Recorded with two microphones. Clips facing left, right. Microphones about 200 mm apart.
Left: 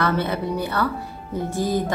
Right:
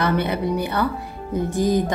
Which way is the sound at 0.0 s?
15° right (ahead or behind).